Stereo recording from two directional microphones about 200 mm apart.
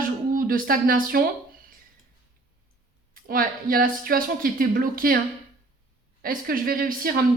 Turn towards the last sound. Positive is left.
turn(degrees=-45)  # may be behind; listen again after turning